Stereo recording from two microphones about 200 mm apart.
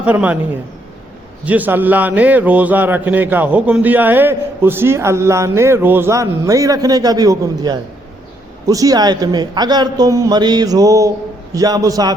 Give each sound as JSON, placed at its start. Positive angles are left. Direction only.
{"t": 0.0, "sound": "a man's voice", "side_deg": -5}
{"t": 1.5, "sound": "a man's voice", "side_deg": -10}